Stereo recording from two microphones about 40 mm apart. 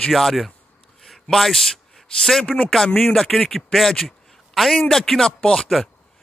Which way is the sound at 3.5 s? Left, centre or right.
Centre.